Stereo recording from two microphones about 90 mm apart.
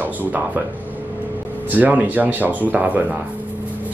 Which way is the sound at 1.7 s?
20° right (ahead or behind).